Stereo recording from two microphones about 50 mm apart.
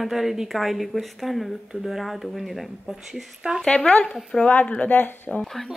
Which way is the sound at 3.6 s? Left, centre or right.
Centre.